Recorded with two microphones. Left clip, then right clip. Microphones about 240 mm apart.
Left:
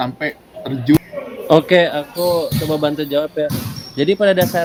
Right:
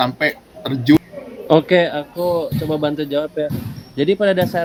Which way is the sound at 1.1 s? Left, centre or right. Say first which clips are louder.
Left 5 dB; left.